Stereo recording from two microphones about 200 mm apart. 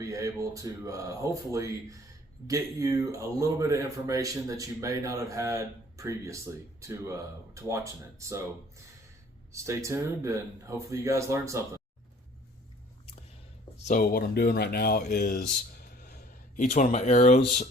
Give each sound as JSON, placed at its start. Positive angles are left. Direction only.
{"t": 0.0, "sound": "a man's voice", "side_deg": -15}
{"t": 9.5, "sound": "a man's voice", "side_deg": -15}
{"t": 13.8, "sound": "speech", "side_deg": 45}